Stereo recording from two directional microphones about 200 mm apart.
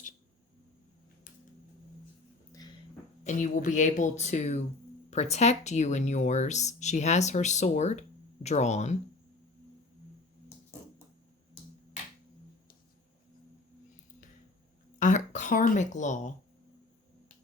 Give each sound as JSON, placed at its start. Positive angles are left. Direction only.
{"t": 2.5, "sound": "a sound", "side_deg": 20}
{"t": 3.2, "sound": "speech", "side_deg": 40}
{"t": 14.9, "sound": "throat clearing", "side_deg": 40}